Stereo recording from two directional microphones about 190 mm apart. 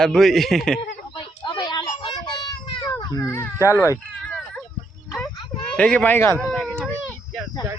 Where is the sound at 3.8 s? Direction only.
10° left (ahead or behind).